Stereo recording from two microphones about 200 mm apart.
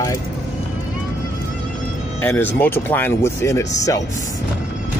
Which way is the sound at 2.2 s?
10° left (ahead or behind).